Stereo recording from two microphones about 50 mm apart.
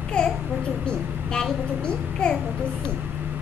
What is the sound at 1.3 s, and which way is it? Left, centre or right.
Babbling, centre.